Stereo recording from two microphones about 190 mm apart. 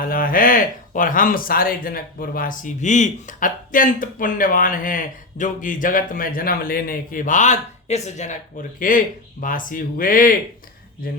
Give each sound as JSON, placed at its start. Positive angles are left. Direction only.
{"t": 0.0, "sound": "speech", "side_deg": 50}